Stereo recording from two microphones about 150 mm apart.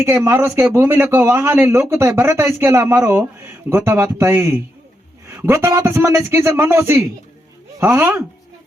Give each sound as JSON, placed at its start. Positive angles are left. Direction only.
{"t": 0.0, "sound": "speech", "side_deg": -20}